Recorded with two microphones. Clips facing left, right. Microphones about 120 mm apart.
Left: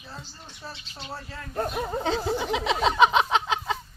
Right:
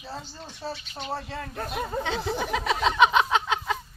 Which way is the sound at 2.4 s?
20° left (ahead or behind).